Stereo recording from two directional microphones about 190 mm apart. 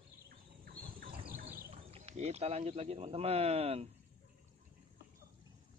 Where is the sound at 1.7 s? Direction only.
30° right (ahead or behind).